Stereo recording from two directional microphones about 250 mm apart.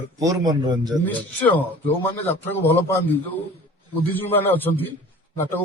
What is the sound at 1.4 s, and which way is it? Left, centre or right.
A man's voice, centre.